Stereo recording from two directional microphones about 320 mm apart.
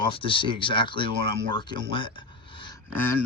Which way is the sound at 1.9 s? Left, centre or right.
Centre.